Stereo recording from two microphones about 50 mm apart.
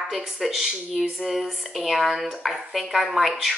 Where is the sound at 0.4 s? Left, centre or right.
Centre.